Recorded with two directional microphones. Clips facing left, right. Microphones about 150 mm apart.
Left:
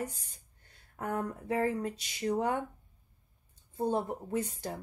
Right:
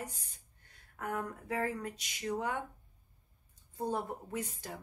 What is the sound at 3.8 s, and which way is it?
Speech, 25° left (ahead or behind).